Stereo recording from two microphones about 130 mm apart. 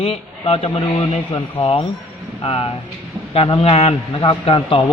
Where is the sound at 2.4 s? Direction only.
45° left (ahead or behind).